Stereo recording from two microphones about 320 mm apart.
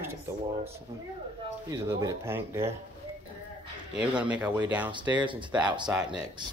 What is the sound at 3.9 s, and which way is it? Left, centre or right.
Speech, centre.